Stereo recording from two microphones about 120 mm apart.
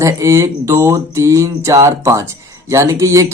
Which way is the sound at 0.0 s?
25° right (ahead or behind).